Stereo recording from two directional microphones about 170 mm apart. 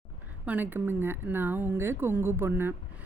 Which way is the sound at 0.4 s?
10° right (ahead or behind).